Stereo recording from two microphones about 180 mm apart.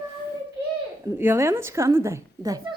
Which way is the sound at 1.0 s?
15° right (ahead or behind).